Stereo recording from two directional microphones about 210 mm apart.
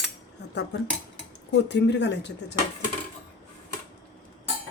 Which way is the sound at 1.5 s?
55° left (ahead or behind).